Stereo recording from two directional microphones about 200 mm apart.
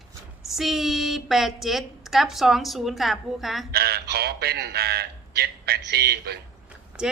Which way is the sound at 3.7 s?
50° right (ahead or behind).